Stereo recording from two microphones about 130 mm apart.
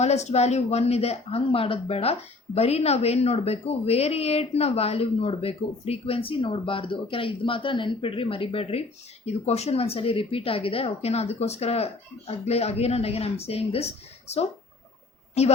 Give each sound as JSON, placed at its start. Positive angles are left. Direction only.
{"t": 0.0, "sound": "a woman's voice", "side_deg": 60}